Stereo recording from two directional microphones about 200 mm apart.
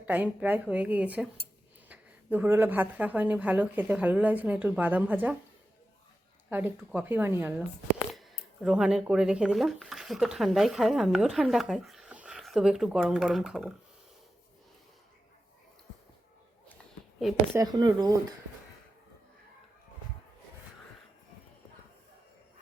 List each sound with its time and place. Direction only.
0.0 s a woman's voice: 10° right (ahead or behind)
6.5 s a woman's voice: 10° right (ahead or behind)
17.5 s speech: 20° right (ahead or behind)